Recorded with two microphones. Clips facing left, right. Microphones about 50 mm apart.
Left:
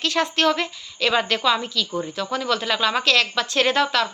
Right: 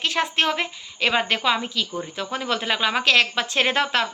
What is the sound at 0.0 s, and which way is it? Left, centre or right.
Speech, right.